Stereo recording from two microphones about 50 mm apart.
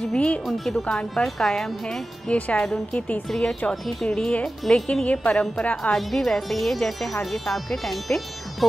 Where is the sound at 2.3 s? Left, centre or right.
Left.